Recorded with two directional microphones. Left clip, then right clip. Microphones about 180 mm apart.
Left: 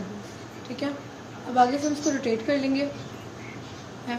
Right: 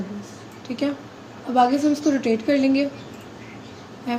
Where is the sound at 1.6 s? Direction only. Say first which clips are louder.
Right 4 dB; 85° right.